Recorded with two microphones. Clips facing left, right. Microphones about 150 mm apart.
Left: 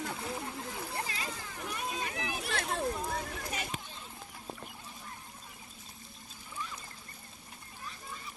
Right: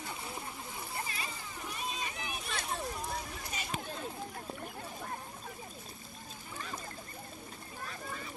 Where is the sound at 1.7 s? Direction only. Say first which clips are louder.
Left 3 dB; 85° left.